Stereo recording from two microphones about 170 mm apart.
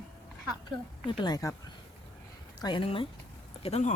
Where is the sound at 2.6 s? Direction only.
30° left (ahead or behind).